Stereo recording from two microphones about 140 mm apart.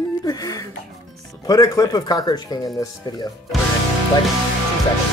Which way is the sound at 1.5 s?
25° left (ahead or behind).